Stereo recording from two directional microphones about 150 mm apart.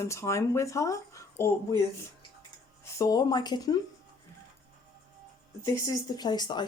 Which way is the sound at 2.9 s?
25° left (ahead or behind).